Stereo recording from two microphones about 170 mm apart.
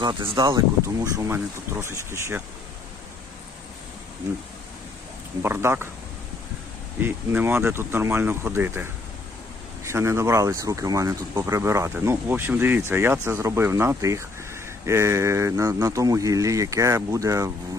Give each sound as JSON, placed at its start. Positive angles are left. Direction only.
{"t": 0.0, "sound": "speech", "side_deg": -25}
{"t": 5.4, "sound": "speech", "side_deg": -15}
{"t": 7.0, "sound": "speech", "side_deg": -10}